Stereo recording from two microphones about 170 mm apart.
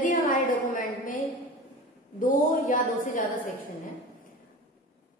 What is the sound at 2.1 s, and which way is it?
A woman's voice, 50° left (ahead or behind).